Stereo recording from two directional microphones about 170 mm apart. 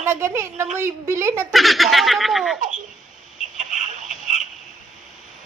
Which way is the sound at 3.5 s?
45° right (ahead or behind).